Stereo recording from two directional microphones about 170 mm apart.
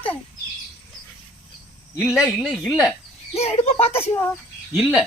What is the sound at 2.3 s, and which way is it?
Speech, centre (ahead or behind).